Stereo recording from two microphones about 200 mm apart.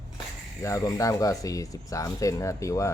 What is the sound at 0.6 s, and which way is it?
Speech, 15° left (ahead or behind).